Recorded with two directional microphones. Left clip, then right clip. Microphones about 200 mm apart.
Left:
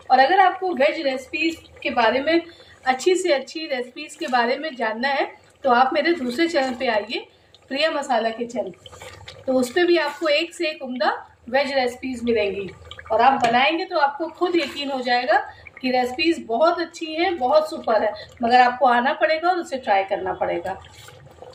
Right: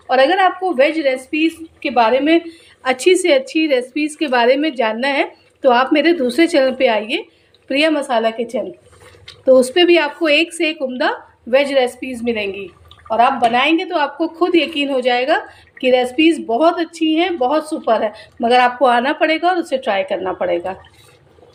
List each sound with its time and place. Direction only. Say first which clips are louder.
0.1 s a woman's voice: right 2 dB; 50° right (ahead or behind)
9.6 s a woman's voice: right 3 dB; 45° right (ahead or behind)
18.4 s a woman's voice: right 3 dB; 45° right (ahead or behind)